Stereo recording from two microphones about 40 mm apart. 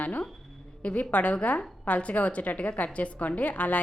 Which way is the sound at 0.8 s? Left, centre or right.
Left.